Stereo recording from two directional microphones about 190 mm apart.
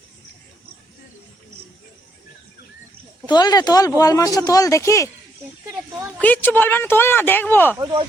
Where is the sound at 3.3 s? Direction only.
20° left (ahead or behind).